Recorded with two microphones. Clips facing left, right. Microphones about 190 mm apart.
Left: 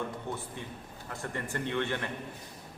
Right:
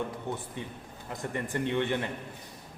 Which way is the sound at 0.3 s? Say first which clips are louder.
Right 2 dB; 15° right (ahead or behind).